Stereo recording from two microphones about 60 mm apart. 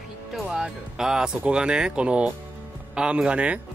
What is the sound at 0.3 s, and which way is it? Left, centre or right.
Speech, centre.